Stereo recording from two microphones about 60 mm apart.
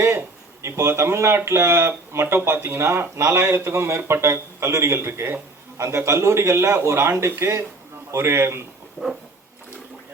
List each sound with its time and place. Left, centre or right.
0.6 s speech: right